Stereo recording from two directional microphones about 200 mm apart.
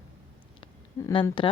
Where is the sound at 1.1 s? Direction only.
25° left (ahead or behind).